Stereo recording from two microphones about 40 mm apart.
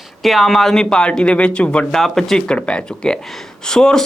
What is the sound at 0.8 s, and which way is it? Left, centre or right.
Speech, left.